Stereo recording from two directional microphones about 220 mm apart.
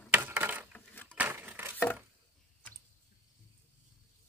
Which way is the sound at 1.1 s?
5° right (ahead or behind).